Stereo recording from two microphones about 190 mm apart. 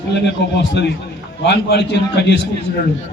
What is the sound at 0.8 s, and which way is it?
A man's voice, 65° left (ahead or behind).